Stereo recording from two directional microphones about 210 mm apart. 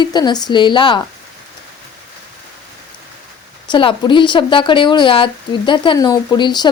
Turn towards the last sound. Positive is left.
turn(degrees=20)  # may be behind; listen again after turning